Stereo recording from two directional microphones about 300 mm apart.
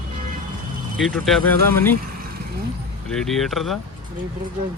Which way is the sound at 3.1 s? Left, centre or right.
Centre.